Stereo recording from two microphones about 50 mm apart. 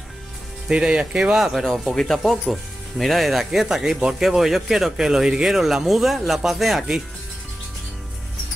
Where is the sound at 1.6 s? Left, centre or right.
Centre.